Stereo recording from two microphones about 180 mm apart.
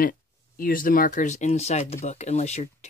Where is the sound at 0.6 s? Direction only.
50° left (ahead or behind).